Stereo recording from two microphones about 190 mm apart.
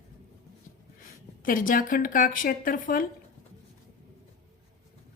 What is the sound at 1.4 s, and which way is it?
A woman's voice, 45° left (ahead or behind).